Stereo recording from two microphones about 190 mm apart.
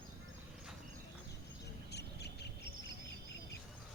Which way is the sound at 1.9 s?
60° left (ahead or behind).